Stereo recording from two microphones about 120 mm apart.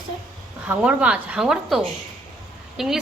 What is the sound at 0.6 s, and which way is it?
A woman's voice, 10° right (ahead or behind).